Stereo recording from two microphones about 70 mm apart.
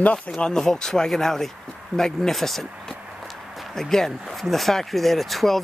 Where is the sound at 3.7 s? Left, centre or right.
Centre.